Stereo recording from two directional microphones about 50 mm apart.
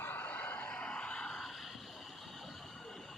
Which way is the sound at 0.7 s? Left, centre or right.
Centre.